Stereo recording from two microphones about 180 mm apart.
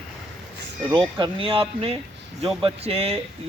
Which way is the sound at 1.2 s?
30° right (ahead or behind).